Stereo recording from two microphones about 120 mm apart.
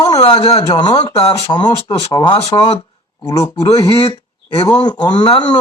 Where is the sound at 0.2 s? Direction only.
50° left (ahead or behind).